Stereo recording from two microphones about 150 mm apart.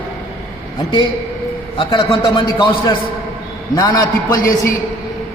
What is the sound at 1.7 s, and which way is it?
A man's voice, 35° left (ahead or behind).